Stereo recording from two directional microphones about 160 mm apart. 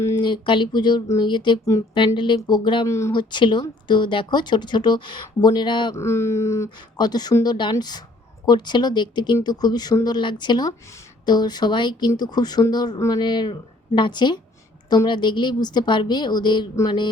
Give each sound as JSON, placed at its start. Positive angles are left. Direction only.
{"t": 0.0, "sound": "a sound", "side_deg": 15}
{"t": 0.3, "sound": "speech", "side_deg": 30}
{"t": 6.0, "sound": "speech", "side_deg": 15}